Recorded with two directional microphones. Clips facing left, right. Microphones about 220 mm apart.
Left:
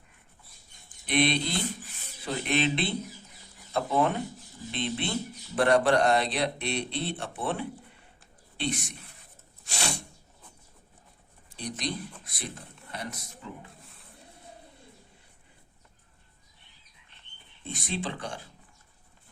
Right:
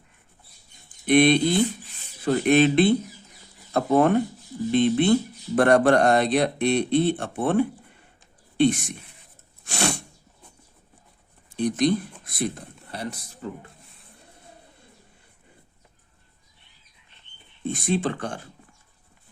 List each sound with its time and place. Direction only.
1.0 s speech: 50° right (ahead or behind)
9.6 s sneeze: 55° right (ahead or behind)
11.4 s speech: 50° right (ahead or behind)
12.9 s speech: 30° right (ahead or behind)
17.7 s speech: 50° right (ahead or behind)